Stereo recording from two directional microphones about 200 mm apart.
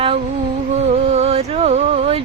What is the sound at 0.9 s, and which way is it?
Music, 30° right (ahead or behind).